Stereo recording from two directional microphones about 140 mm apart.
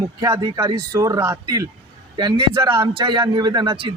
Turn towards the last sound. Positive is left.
turn(degrees=-40)  # may be behind; listen again after turning